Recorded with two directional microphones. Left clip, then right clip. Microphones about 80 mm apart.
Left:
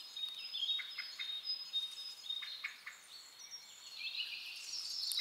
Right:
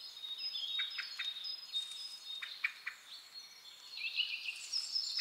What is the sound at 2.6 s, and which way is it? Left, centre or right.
Bird, right.